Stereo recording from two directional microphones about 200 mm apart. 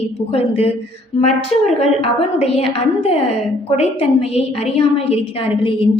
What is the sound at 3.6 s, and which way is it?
A woman's voice, 30° left (ahead or behind).